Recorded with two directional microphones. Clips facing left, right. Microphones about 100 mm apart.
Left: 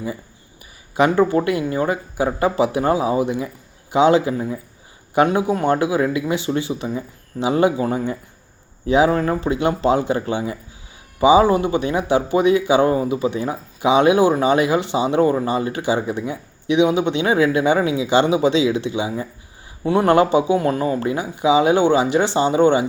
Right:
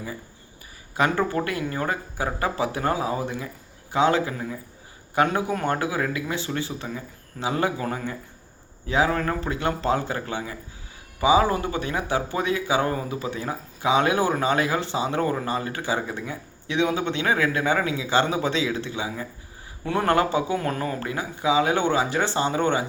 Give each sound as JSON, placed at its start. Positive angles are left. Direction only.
{"t": 0.9, "sound": "speech", "side_deg": 20}